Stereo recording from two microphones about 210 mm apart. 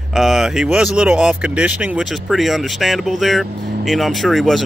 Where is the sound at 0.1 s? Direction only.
Centre (ahead or behind).